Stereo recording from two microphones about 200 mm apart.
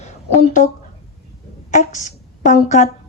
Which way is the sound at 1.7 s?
40° left (ahead or behind).